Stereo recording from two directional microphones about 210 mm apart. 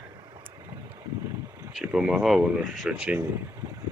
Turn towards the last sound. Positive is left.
turn(degrees=-5)  # may be behind; listen again after turning